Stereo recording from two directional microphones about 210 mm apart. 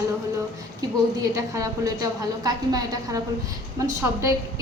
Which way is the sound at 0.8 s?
15° right (ahead or behind).